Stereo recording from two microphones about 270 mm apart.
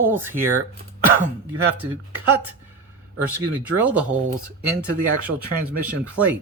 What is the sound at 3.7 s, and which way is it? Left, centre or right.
Speech, centre.